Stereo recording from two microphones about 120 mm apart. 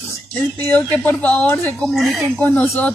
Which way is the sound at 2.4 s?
15° left (ahead or behind).